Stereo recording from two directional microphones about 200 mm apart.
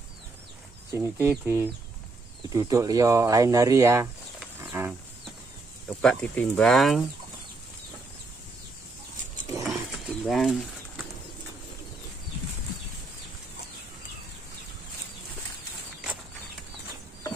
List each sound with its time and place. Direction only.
1.2 s speech: 15° right (ahead or behind)
4.4 s wild animals: 10° right (ahead or behind)
5.9 s speech: 5° left (ahead or behind)
9.6 s a sound: centre (ahead or behind)